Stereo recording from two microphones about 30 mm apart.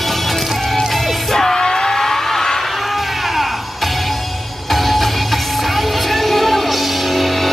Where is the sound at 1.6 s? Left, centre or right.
Left.